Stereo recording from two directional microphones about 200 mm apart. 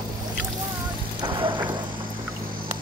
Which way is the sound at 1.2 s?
25° right (ahead or behind).